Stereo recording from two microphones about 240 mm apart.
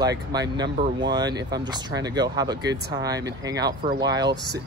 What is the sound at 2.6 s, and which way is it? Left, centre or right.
Speech, right.